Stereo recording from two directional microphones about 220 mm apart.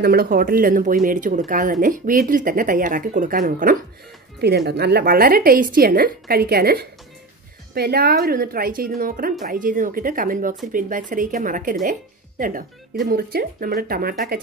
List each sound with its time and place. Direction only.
0.0 s speech: 45° right (ahead or behind)